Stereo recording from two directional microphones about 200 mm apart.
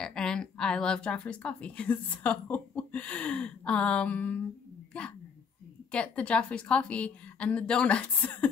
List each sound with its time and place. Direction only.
0.0 s a woman's voice: 5° left (ahead or behind)